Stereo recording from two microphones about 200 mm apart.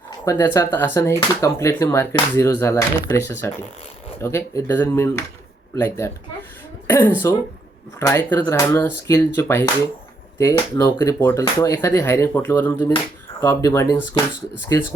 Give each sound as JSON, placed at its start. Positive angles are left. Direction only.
{"t": 0.3, "sound": "speech", "side_deg": 15}